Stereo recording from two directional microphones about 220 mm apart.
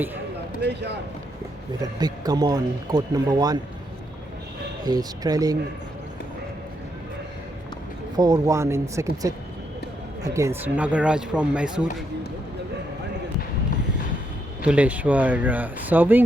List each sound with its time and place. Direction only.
0.6 s speech: 50° right (ahead or behind)
2.0 s speech: 20° right (ahead or behind)
4.9 s speech: 15° right (ahead or behind)
8.1 s speech: 15° right (ahead or behind)
14.6 s speech: 5° right (ahead or behind)